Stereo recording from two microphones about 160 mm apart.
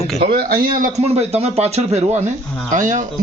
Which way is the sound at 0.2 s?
75° right (ahead or behind).